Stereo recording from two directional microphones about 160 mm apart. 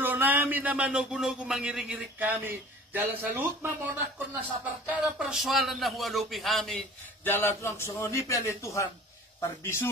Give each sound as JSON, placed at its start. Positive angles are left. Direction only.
{"t": 0.0, "sound": "speech", "side_deg": -10}
{"t": 7.2, "sound": "a man's voice", "side_deg": 15}